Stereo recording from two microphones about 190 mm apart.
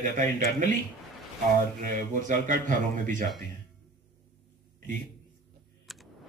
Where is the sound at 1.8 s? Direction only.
45° right (ahead or behind).